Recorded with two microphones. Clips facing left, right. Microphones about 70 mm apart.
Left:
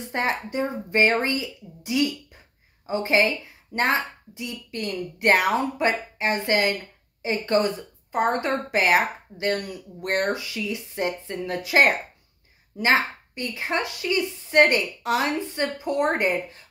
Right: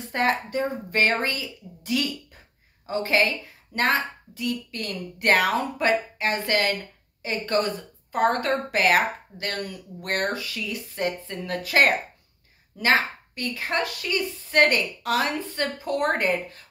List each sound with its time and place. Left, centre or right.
0.1 s speech: left